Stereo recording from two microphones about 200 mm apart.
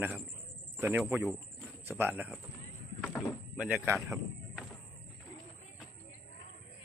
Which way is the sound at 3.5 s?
5° right (ahead or behind).